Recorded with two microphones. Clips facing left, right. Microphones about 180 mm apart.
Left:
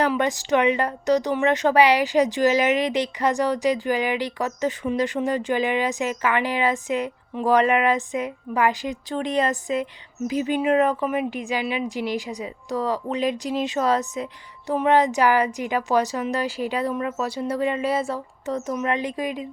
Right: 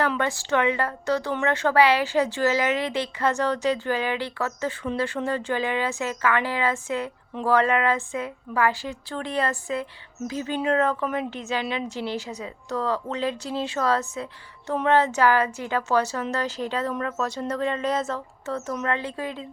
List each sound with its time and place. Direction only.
0.2 s a woman's voice: 15° left (ahead or behind)